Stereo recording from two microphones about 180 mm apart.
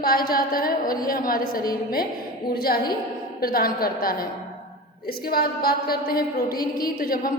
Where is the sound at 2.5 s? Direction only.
55° left (ahead or behind).